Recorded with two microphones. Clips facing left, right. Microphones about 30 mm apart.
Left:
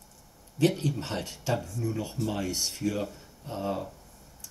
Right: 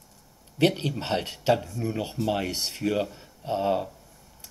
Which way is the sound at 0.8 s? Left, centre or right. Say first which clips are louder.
Right 4 dB; right.